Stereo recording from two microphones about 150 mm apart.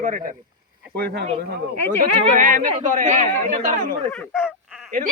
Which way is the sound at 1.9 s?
55° right (ahead or behind).